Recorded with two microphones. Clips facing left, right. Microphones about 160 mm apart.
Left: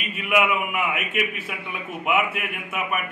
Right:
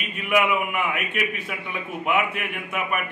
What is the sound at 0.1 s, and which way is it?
A man's voice, 5° left (ahead or behind).